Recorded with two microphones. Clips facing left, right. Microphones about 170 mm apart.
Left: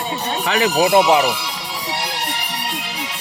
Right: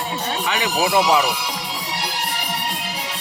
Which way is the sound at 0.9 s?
25° left (ahead or behind).